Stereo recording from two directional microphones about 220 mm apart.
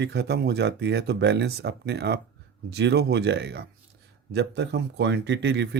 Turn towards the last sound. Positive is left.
turn(degrees=-50)  # may be behind; listen again after turning